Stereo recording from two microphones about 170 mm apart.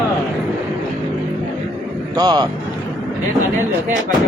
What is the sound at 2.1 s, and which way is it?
Speech, 25° right (ahead or behind).